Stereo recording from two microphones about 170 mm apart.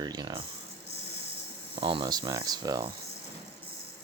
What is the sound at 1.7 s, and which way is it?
Speech, 30° right (ahead or behind).